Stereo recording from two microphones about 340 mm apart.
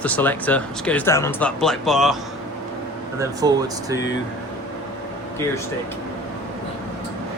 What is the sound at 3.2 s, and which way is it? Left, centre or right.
Speech, centre.